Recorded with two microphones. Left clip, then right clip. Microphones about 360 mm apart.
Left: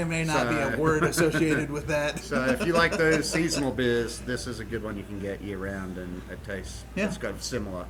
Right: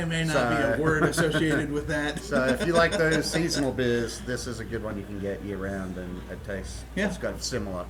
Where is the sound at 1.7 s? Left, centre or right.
Left.